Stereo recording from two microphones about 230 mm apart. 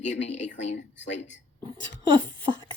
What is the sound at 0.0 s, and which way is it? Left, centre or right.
Speech, left.